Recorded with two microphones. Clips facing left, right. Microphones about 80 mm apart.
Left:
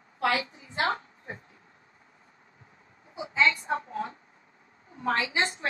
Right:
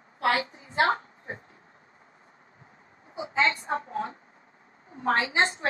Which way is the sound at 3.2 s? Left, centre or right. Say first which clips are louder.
Even; right.